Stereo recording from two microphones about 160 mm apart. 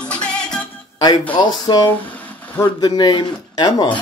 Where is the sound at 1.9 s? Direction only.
10° left (ahead or behind).